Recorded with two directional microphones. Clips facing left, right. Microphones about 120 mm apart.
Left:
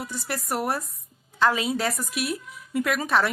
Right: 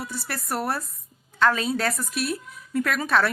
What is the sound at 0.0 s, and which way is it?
A woman's voice, 15° left (ahead or behind).